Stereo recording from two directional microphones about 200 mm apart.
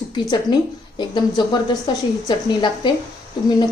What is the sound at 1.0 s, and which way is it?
A woman's voice, 20° left (ahead or behind).